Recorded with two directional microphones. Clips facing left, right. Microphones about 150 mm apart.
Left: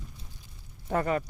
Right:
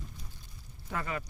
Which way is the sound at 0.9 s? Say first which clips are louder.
Left 9 dB; 45° left (ahead or behind).